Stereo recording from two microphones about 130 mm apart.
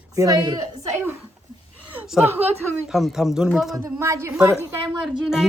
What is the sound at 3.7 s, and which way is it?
Speech, 25° right (ahead or behind).